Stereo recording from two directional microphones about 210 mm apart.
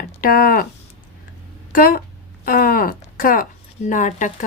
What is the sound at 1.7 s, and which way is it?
Speech, 40° left (ahead or behind).